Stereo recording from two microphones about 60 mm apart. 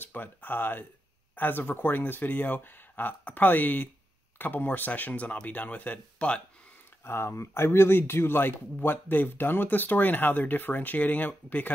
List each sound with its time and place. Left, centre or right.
0.0 s speech: left
7.1 s speech: left